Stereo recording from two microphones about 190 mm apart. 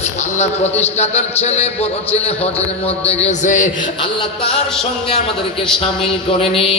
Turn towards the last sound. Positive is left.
turn(degrees=30)  # may be behind; listen again after turning